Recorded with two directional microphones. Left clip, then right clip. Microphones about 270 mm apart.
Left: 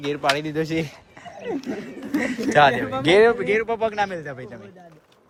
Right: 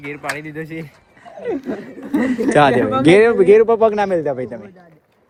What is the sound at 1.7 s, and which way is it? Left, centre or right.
A man's voice, centre.